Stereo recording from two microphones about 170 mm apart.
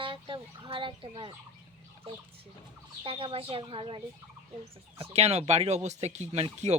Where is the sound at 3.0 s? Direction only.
35° right (ahead or behind).